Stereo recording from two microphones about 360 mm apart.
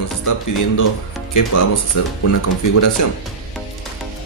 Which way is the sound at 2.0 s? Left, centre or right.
Left.